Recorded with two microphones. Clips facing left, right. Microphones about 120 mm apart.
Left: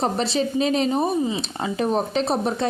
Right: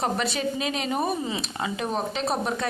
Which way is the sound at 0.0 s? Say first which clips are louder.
Left 4 dB; 30° left (ahead or behind).